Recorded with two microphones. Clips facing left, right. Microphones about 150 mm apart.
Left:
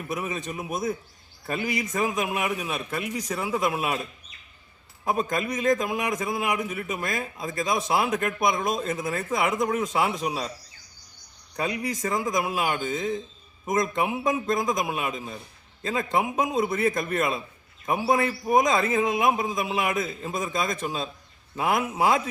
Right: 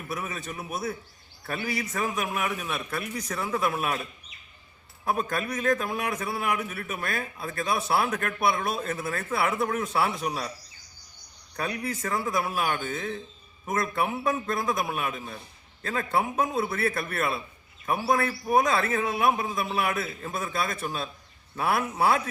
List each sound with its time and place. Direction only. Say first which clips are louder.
0.1 s a man's voice: left 3 dB; 15° left (ahead or behind)
5.3 s a man's voice: left 3 dB; 15° left (ahead or behind)
11.5 s a man's voice: left 3 dB; 10° left (ahead or behind)